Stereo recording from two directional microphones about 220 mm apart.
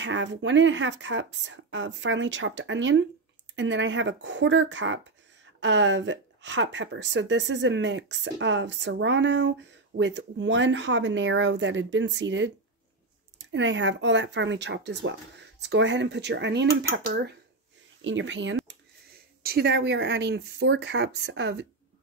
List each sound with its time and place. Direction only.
0.0 s speech: 55° right (ahead or behind)
19.4 s speech: 45° right (ahead or behind)